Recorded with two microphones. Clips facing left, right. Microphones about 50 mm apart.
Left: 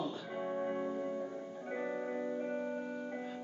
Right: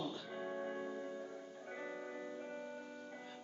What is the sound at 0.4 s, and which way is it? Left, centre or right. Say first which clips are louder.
Music: left 7 dB; centre.